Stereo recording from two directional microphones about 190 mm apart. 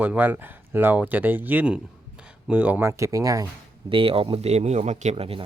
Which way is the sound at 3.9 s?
30° right (ahead or behind).